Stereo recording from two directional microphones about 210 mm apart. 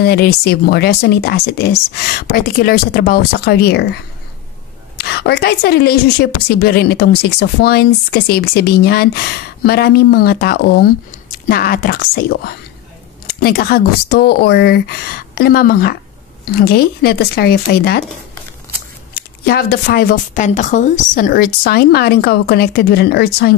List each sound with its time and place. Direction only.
0.0 s a woman's voice: 45° left (ahead or behind)
19.1 s a woman's voice: 45° left (ahead or behind)